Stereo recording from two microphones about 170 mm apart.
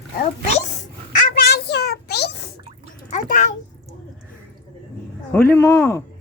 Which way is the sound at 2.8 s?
50° left (ahead or behind).